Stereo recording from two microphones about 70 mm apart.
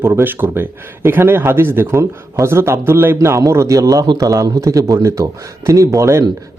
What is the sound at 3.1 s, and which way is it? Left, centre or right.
Speech, right.